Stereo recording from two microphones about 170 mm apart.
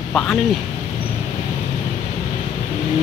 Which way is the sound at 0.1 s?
5° left (ahead or behind).